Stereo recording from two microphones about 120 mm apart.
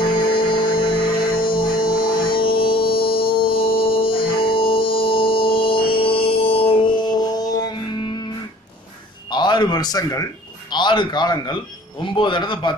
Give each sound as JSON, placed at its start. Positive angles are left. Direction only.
{"t": 0.0, "sound": "music", "side_deg": 45}
{"t": 9.3, "sound": "a sound", "side_deg": 40}
{"t": 10.7, "sound": "a man's voice", "side_deg": 40}